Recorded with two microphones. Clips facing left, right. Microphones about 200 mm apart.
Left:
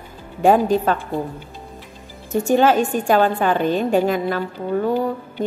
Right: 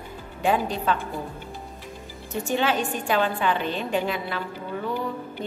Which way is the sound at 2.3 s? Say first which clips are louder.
Left 9 dB; 45° left (ahead or behind).